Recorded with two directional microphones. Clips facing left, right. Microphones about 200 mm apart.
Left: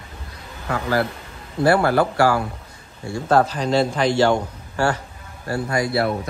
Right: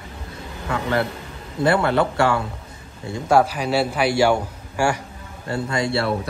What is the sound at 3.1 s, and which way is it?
A man's voice, 10° right (ahead or behind).